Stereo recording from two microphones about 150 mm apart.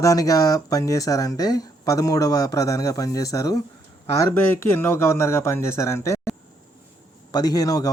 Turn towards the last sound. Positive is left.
turn(degrees=25)  # may be behind; listen again after turning